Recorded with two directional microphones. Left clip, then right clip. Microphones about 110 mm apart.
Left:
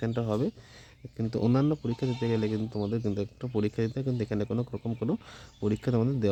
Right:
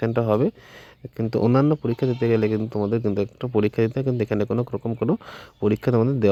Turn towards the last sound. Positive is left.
turn(degrees=-25)  # may be behind; listen again after turning